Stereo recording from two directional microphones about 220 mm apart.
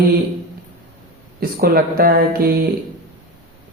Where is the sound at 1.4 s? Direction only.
45° right (ahead or behind).